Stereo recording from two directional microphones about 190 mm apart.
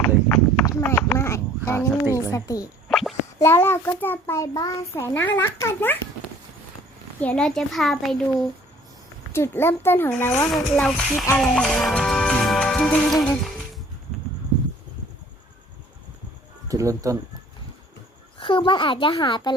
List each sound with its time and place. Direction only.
0.3 s clip-clop: 5° left (ahead or behind)
0.6 s a sound: 15° left (ahead or behind)
2.1 s a child's voice: 15° left (ahead or behind)
2.9 s a sound: centre (ahead or behind)
3.3 s a child's voice: 15° left (ahead or behind)
7.2 s a child's voice: 5° left (ahead or behind)
9.3 s a child's voice: 15° left (ahead or behind)
11.3 s music: centre (ahead or behind)
13.2 s a child's voice: 5° left (ahead or behind)
16.6 s speech: 15° right (ahead or behind)
18.3 s a woman's voice: 25° left (ahead or behind)